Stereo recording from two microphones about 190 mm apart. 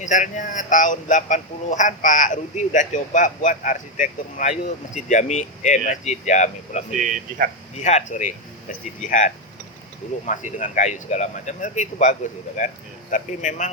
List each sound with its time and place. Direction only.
0.0 s speech: 40° left (ahead or behind)
6.9 s speech: 45° right (ahead or behind)
7.8 s speech: 40° left (ahead or behind)